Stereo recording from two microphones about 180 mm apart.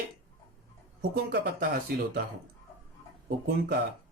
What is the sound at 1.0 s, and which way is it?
Speech, 60° right (ahead or behind).